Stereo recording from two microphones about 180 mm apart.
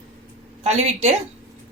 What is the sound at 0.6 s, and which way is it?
Speech, 40° right (ahead or behind).